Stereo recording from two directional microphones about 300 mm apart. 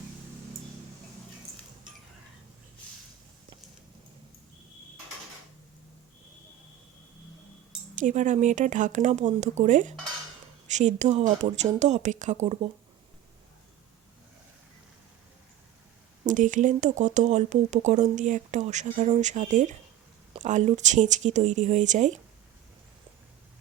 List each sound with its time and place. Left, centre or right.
7.9 s speech: right
16.2 s speech: right